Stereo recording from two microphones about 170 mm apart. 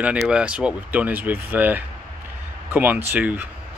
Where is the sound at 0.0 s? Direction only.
5° right (ahead or behind).